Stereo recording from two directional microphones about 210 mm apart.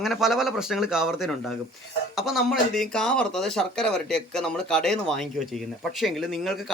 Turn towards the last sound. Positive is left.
turn(degrees=0)  # may be behind; listen again after turning